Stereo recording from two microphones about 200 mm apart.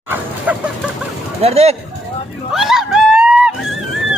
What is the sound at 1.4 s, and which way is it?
Speech, 30° right (ahead or behind).